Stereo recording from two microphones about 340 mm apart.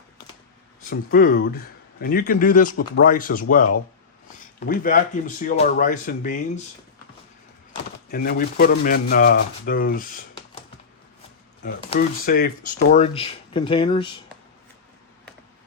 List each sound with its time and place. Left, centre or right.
0.9 s speech: left
4.6 s speech: left
8.1 s speech: left
11.6 s speech: left